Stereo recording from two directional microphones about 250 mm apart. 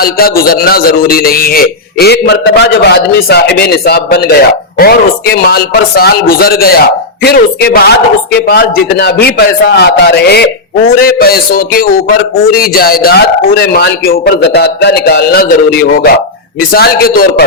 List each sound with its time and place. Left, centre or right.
0.0 s a man's voice: left